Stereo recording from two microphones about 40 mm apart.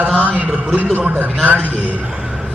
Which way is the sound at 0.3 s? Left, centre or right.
Right.